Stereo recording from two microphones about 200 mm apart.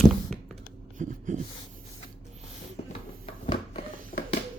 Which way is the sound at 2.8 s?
35° left (ahead or behind).